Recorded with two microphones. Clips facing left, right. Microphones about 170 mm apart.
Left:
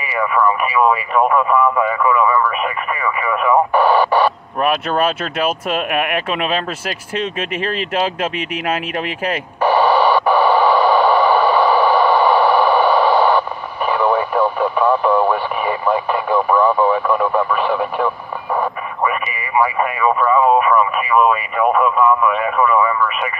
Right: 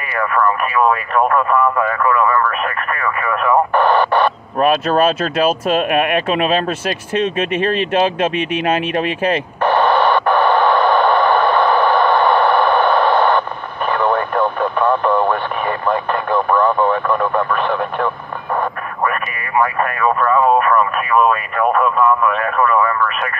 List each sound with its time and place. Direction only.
0.0 s speech: 5° left (ahead or behind)
4.6 s speech: 25° right (ahead or behind)
9.6 s radio: 5° left (ahead or behind)